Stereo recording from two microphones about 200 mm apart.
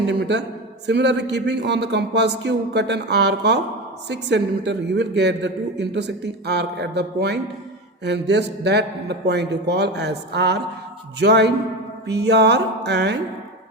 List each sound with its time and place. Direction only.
0.1 s a man's voice: 60° right (ahead or behind)